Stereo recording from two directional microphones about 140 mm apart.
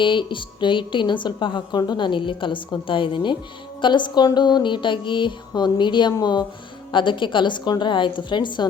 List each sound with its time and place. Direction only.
0.0 s a woman's voice: 35° left (ahead or behind)